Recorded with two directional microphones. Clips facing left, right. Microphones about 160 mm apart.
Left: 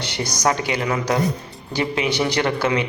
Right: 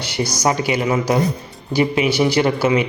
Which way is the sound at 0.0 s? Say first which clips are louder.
Right 2 dB; 10° right (ahead or behind).